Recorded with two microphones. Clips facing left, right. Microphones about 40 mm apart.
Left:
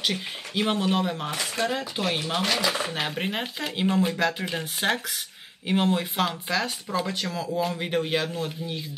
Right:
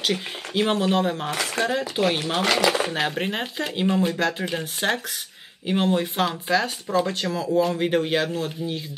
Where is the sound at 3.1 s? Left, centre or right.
Centre.